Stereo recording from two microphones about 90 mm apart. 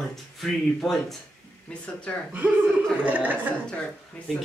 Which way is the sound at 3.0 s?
20° right (ahead or behind).